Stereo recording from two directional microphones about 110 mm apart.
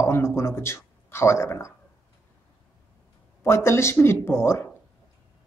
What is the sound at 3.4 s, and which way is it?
Speech, 25° left (ahead or behind).